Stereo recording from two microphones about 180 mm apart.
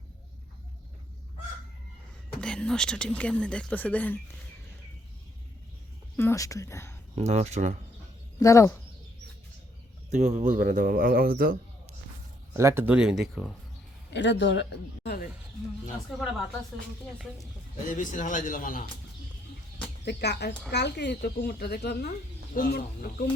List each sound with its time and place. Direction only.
2.4 s speech: 5° left (ahead or behind)
6.1 s speech: 15° left (ahead or behind)
7.2 s speech: 40° right (ahead or behind)
8.4 s speech: 15° left (ahead or behind)
10.1 s speech: 40° right (ahead or behind)
12.5 s speech: 15° right (ahead or behind)
14.1 s speech: 80° left
17.8 s speech: 45° left (ahead or behind)
20.1 s speech: 65° left (ahead or behind)